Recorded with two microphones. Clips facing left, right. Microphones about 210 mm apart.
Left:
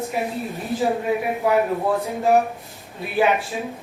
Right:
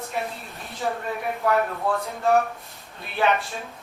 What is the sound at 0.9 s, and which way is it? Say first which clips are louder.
Speech: left 7 dB; 10° left (ahead or behind).